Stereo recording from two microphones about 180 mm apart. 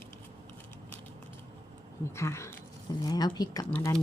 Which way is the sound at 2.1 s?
15° left (ahead or behind).